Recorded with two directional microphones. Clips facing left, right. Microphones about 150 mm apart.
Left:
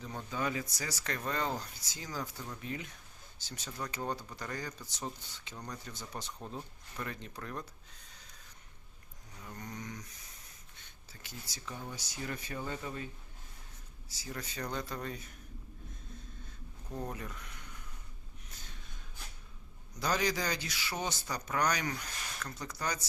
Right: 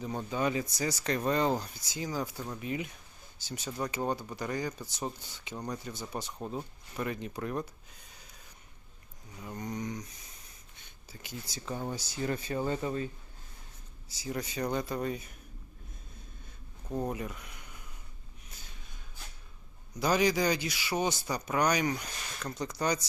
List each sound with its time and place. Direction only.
0.2 s speech: 20° right (ahead or behind)
8.1 s a sound: 10° right (ahead or behind)
9.4 s speech: 15° right (ahead or behind)
10.8 s a sound: 15° right (ahead or behind)
11.6 s speech: 40° right (ahead or behind)
14.1 s speech: 15° right (ahead or behind)
16.9 s speech: 15° right (ahead or behind)
20.0 s speech: 10° right (ahead or behind)